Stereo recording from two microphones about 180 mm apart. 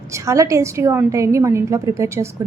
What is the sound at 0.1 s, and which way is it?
A woman's voice, 15° right (ahead or behind).